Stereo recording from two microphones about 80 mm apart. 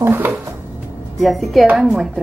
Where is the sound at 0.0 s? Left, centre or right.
Right.